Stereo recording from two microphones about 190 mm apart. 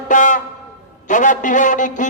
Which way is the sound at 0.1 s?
40° left (ahead or behind).